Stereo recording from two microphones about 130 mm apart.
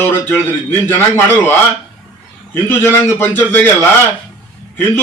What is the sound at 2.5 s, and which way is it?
A man's voice, 15° left (ahead or behind).